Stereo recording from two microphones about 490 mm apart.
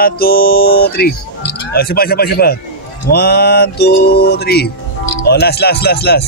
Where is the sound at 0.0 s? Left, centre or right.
Centre.